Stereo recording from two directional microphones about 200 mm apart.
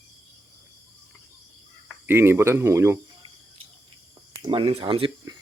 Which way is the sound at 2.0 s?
10° right (ahead or behind).